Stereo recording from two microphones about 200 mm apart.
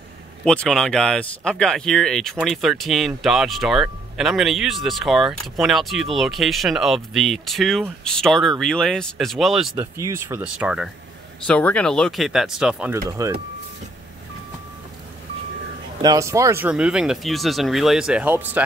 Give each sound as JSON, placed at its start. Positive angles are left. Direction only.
{"t": 0.5, "sound": "speech", "side_deg": 0}
{"t": 10.0, "sound": "speech", "side_deg": -10}
{"t": 11.4, "sound": "speech", "side_deg": 5}
{"t": 13.1, "sound": "speech", "side_deg": -25}
{"t": 16.0, "sound": "speech", "side_deg": -15}